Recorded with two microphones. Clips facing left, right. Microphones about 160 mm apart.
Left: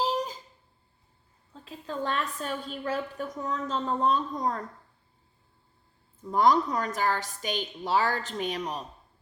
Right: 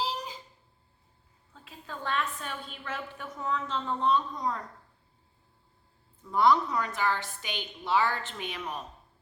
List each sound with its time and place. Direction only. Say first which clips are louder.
0.0 s a sound: left 6 dB; 45° left (ahead or behind)
1.6 s a woman's voice: left 5 dB; 40° left (ahead or behind)
6.3 s a woman's voice: left 1 dB; 45° left (ahead or behind)